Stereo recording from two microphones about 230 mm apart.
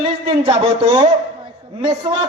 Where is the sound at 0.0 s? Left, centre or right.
Right.